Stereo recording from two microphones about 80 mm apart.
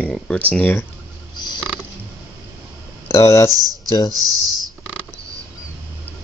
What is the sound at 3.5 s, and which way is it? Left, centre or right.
Speech, right.